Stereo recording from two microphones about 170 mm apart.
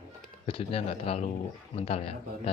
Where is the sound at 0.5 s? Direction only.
35° left (ahead or behind).